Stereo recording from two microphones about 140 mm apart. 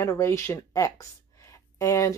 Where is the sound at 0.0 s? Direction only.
20° left (ahead or behind).